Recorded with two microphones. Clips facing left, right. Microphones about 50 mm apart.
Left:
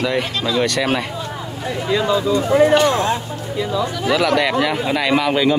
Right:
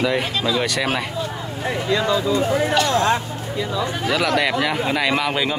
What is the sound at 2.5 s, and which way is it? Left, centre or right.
Speech, left.